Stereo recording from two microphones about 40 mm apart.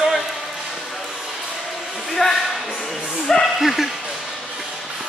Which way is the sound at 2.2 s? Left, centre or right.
Centre.